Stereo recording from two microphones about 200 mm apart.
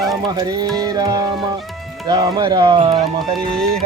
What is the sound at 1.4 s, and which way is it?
Music, centre (ahead or behind).